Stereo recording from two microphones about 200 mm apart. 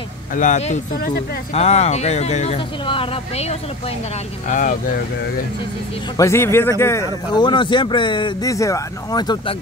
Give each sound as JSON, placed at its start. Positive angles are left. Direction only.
{"t": 0.4, "sound": "speech", "side_deg": 35}
{"t": 4.5, "sound": "speech", "side_deg": 40}
{"t": 6.1, "sound": "speech", "side_deg": 15}